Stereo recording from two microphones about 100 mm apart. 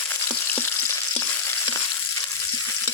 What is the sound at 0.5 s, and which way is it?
Frying, 25° left (ahead or behind).